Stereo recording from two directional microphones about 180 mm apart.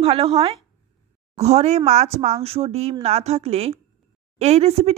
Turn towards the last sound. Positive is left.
turn(degrees=-35)  # may be behind; listen again after turning